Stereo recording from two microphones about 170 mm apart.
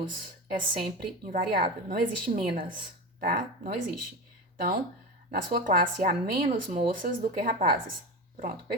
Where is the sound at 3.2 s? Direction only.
55° right (ahead or behind).